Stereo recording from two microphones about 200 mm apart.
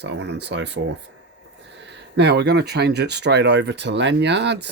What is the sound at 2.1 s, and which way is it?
Speech, 55° right (ahead or behind).